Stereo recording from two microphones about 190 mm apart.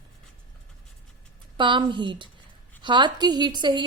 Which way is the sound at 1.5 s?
25° right (ahead or behind).